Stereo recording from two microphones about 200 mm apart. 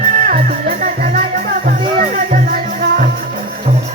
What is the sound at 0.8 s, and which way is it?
Music, 40° right (ahead or behind).